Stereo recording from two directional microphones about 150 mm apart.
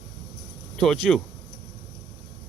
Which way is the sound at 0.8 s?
5° left (ahead or behind).